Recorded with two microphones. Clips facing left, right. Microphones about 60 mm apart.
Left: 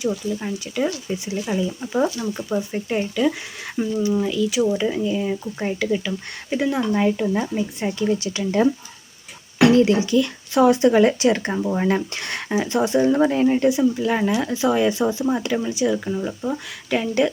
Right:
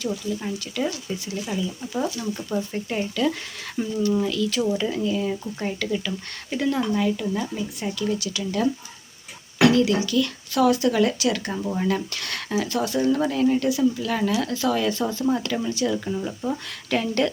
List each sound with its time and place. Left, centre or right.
0.0 s speech: centre
6.9 s speech: left; by 17.3 s centre